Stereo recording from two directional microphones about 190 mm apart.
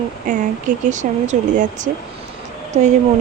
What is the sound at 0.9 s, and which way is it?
Speech, 40° right (ahead or behind).